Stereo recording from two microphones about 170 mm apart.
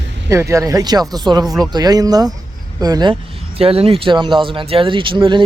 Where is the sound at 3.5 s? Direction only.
35° right (ahead or behind).